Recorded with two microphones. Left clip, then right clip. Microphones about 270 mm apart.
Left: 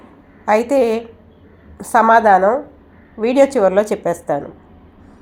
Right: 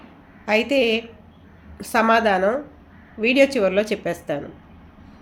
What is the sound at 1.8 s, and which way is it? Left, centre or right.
Speech, centre.